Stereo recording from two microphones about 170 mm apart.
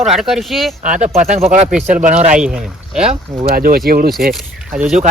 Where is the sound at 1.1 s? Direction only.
40° right (ahead or behind).